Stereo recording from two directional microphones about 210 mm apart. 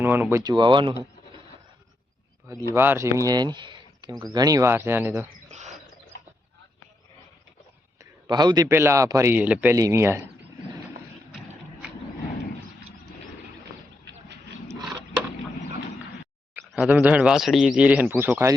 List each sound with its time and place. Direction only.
0.0 s speech: 10° right (ahead or behind)
2.7 s speech: 10° right (ahead or behind)
5.5 s a sound: 35° right (ahead or behind)
7.9 s speech: 20° right (ahead or behind)
16.7 s speech: 5° right (ahead or behind)